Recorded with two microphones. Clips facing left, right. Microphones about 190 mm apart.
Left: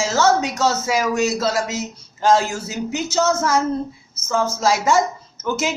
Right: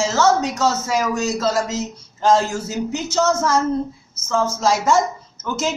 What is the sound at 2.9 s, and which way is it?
Speech, 5° left (ahead or behind).